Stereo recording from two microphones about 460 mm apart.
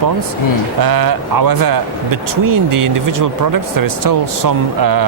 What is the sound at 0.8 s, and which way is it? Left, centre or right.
A man's voice, right.